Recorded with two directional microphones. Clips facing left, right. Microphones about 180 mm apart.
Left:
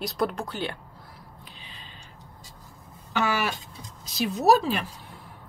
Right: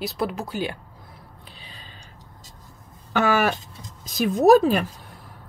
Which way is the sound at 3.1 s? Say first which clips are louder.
Right 6 dB; 50° right (ahead or behind).